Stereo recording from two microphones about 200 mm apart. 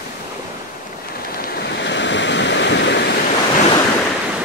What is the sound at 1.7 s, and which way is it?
Waves, 60° left (ahead or behind).